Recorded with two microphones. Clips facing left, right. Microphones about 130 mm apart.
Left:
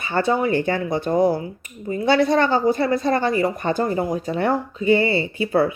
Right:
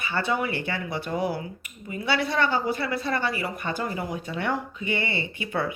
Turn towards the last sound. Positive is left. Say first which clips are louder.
# left 9 dB
turn(degrees=35)  # may be behind; listen again after turning